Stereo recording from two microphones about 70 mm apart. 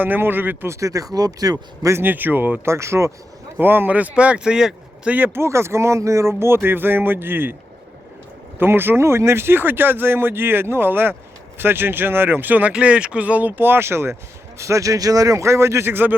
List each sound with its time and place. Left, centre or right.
0.0 s speech: right
0.7 s a man's voice: right
1.1 s speech: right
1.9 s speech: right
2.7 s speech: right
3.6 s speech: right; by 5.1 s centre
5.1 s speech: right
8.5 s speech: right
14.6 s a man's voice: right